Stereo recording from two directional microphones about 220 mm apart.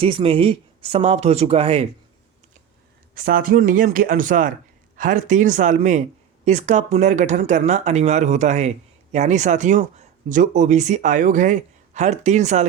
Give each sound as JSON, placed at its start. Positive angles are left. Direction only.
{"t": 0.0, "sound": "speech", "side_deg": -25}
{"t": 3.2, "sound": "speech", "side_deg": -40}